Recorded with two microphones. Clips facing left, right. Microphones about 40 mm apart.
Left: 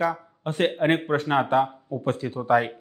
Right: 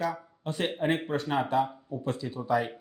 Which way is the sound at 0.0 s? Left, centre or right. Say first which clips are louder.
Left 6 dB; left.